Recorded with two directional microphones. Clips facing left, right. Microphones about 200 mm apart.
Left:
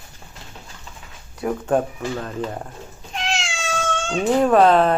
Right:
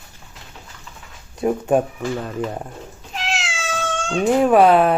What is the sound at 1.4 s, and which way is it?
Speech, 15° right (ahead or behind).